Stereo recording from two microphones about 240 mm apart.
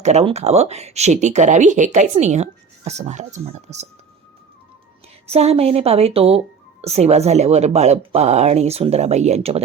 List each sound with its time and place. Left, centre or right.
0.0 s speech: right
5.2 s speech: right